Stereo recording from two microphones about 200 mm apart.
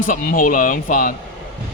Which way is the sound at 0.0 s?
45° left (ahead or behind).